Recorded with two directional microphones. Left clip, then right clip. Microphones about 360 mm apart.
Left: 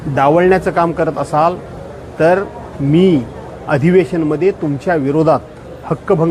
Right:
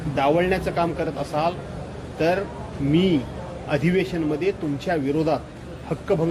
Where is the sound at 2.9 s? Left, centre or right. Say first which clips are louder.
Left 9 dB; left.